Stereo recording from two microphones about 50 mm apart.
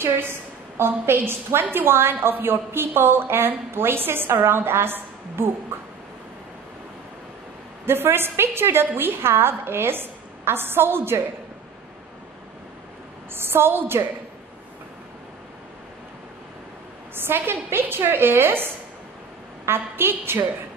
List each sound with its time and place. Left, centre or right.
0.0 s a woman's voice: right
7.8 s a woman's voice: right
13.3 s a woman's voice: right
17.1 s a woman's voice: right